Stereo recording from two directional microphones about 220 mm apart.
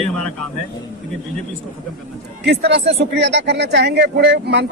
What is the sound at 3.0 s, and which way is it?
Speech, 50° right (ahead or behind).